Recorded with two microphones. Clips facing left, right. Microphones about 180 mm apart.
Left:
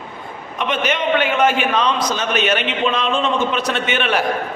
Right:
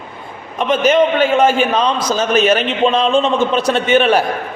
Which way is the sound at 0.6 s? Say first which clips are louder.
Right 8 dB; 35° right (ahead or behind).